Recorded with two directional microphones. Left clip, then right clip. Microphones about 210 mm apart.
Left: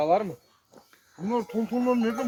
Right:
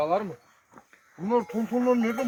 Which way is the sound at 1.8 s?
20° right (ahead or behind).